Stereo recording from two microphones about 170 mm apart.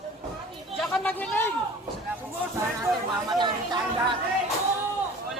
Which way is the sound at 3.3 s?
25° right (ahead or behind).